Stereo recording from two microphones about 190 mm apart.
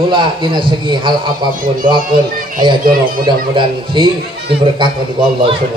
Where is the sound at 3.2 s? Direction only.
25° right (ahead or behind).